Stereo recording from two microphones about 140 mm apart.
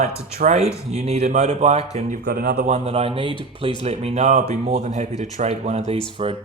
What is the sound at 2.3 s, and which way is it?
Speech, 90° right.